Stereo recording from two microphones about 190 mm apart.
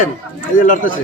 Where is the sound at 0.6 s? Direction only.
45° left (ahead or behind).